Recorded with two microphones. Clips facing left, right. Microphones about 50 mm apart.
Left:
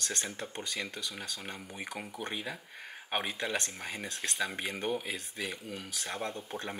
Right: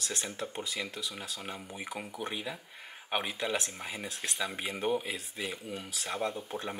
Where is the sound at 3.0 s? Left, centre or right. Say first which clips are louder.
Right 1 dB; centre.